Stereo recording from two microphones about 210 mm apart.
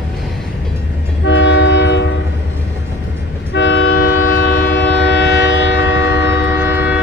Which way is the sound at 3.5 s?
60° left (ahead or behind).